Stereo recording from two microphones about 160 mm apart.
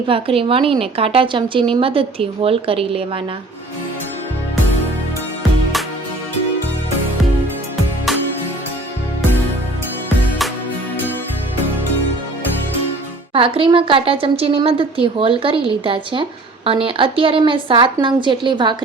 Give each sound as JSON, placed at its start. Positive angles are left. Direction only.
{"t": 0.1, "sound": "a woman's voice", "side_deg": -35}
{"t": 13.3, "sound": "a woman's voice", "side_deg": -35}